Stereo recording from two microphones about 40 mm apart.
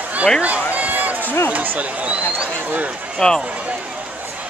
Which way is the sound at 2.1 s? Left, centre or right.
Right.